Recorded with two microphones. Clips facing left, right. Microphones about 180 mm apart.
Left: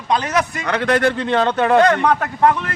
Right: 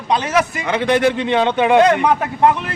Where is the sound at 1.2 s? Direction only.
10° right (ahead or behind).